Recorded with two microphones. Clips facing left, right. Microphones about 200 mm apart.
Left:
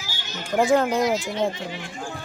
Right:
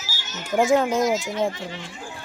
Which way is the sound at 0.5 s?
Centre (ahead or behind).